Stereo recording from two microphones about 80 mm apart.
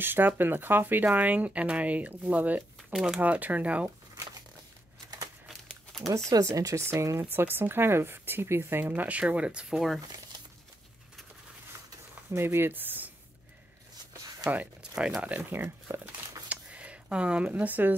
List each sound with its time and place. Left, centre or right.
0.0 s speech: right
2.9 s speech: centre
3.2 s speech: centre
6.0 s speech: right; by 9.9 s centre
12.3 s speech: right
14.4 s speech: centre
15.3 s speech: right
16.0 s a sound: centre